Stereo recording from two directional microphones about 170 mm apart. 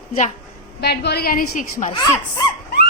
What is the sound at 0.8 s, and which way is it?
A woman's voice, 75° left (ahead or behind).